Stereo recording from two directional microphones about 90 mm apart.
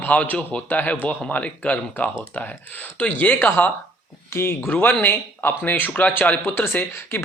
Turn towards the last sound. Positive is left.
turn(degrees=25)  # may be behind; listen again after turning